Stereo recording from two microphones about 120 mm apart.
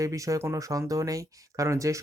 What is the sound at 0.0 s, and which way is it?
Speech, 30° right (ahead or behind).